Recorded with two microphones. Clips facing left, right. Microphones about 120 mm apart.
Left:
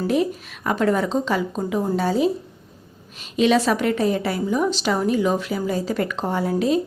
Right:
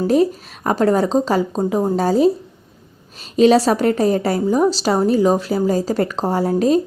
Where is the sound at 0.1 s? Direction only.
35° right (ahead or behind).